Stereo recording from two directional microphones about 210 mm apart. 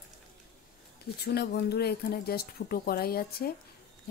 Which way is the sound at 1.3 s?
50° left (ahead or behind).